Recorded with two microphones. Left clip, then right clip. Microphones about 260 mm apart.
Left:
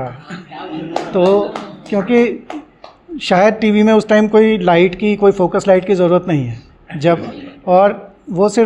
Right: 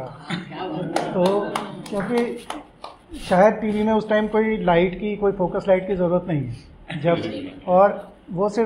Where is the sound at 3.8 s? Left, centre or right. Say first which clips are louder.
Left 10 dB; left.